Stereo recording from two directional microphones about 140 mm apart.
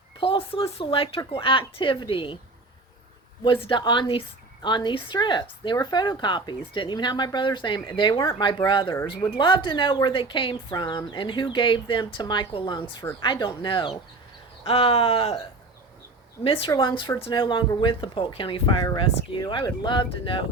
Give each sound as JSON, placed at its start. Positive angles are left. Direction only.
{"t": 0.2, "sound": "speech", "side_deg": 40}
{"t": 3.4, "sound": "speech", "side_deg": 40}
{"t": 16.4, "sound": "speech", "side_deg": 40}